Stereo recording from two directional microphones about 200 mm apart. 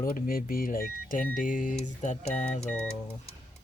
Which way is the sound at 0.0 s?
45° left (ahead or behind).